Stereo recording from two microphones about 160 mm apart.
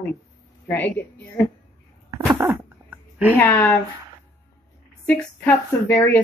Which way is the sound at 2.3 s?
10° right (ahead or behind).